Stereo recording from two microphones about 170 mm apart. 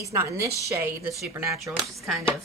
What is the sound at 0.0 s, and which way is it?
Speech, 20° right (ahead or behind).